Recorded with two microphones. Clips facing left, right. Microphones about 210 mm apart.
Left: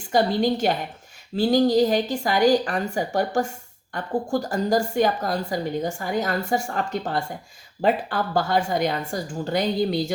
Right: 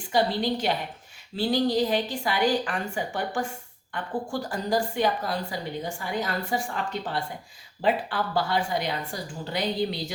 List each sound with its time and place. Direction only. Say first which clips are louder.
0.1 s a woman's voice: left 4 dB; 45° left (ahead or behind)